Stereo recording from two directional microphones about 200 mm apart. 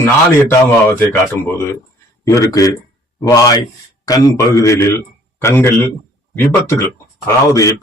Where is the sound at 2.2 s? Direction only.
15° left (ahead or behind).